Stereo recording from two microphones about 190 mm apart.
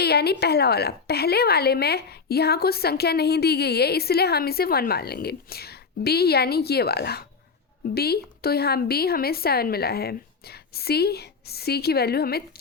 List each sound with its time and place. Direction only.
0.0 s a woman's voice: 55° left (ahead or behind)